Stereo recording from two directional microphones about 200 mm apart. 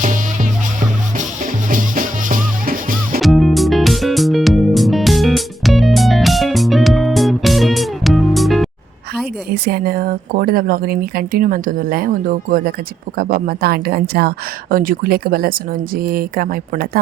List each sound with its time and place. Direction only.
0.8 s music: 40° right (ahead or behind)
3.2 s music: centre (ahead or behind)
9.5 s a woman's voice: 50° right (ahead or behind)